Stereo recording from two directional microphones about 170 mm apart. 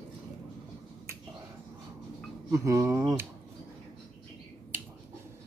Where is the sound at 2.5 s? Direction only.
20° right (ahead or behind).